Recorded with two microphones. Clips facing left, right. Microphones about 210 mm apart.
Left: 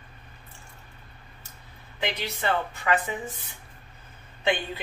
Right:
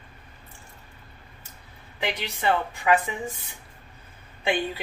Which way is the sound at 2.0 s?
15° right (ahead or behind).